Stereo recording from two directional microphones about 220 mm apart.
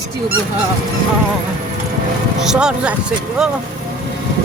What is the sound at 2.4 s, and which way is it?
A man's voice, 5° right (ahead or behind).